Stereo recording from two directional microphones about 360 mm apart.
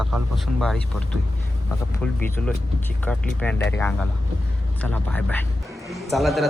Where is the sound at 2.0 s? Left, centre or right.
Centre.